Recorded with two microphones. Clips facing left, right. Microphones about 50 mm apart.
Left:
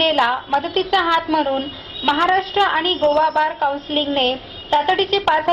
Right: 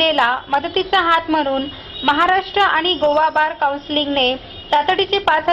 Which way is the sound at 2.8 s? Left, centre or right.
Right.